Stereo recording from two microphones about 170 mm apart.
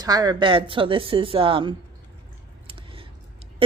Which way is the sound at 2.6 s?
30° right (ahead or behind).